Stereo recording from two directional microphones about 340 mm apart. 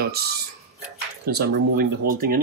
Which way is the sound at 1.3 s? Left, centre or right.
Right.